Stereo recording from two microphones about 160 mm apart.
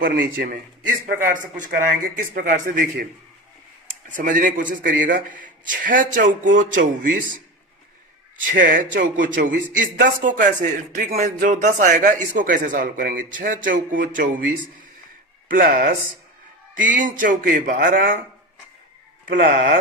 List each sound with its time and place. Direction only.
0.0 s a man's voice: 70° right (ahead or behind)
4.1 s speech: 55° right (ahead or behind)
8.5 s speech: 60° right (ahead or behind)
19.4 s speech: 60° right (ahead or behind)